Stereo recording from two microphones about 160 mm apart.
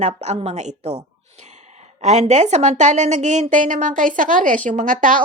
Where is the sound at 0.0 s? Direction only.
45° right (ahead or behind).